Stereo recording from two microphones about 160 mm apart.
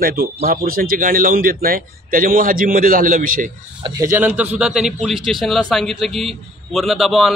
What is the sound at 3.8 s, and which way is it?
Speech, 20° right (ahead or behind).